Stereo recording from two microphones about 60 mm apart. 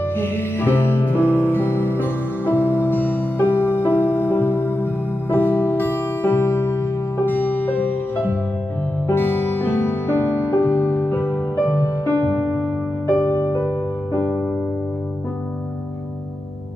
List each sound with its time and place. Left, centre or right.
0.2 s music: left
9.0 s music: left